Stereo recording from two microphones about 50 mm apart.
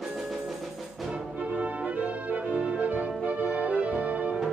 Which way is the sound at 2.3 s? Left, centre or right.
Right.